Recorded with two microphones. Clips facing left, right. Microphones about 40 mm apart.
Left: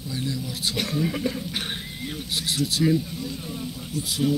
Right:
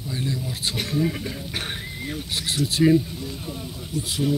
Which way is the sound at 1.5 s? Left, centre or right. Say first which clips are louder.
Right 1 dB; centre.